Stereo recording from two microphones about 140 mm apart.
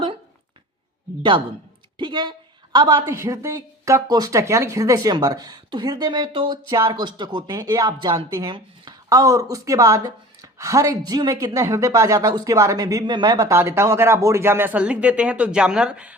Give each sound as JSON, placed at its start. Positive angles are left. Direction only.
{"t": 2.0, "sound": "speech", "side_deg": -35}
{"t": 6.7, "sound": "speech", "side_deg": -20}
{"t": 7.0, "sound": "speech", "side_deg": -35}
{"t": 13.5, "sound": "speech", "side_deg": -20}